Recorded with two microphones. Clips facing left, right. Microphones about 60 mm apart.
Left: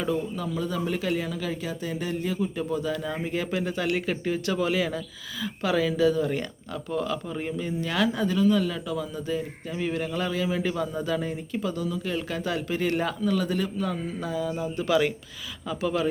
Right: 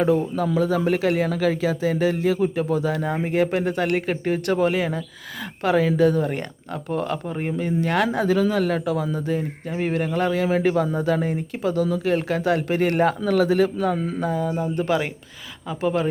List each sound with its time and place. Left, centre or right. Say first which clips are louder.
0.0 s speech: right 8 dB; right
0.4 s speech: right 8 dB; right
7.6 s speech: right 5 dB; right
13.9 s speech: right 6 dB; right
15.7 s speech: right 4 dB; right